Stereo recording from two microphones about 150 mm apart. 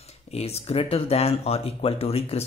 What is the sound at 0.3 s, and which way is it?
Speech, 45° left (ahead or behind).